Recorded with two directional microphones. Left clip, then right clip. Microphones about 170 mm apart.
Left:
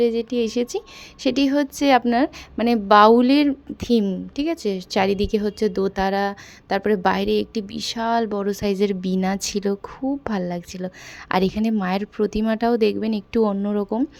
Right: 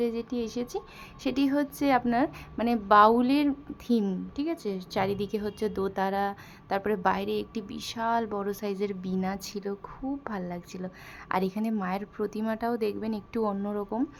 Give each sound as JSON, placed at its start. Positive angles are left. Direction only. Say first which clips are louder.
{"t": 0.0, "sound": "speech", "louder": "left 10 dB", "side_deg": 45}